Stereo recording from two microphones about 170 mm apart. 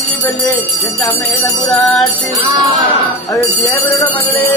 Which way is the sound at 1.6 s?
Centre (ahead or behind).